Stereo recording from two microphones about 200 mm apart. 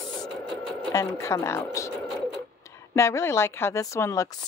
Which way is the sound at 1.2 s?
15° left (ahead or behind).